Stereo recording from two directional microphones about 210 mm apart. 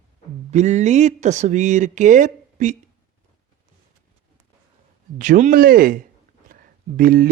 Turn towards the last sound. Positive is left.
turn(degrees=-45)  # may be behind; listen again after turning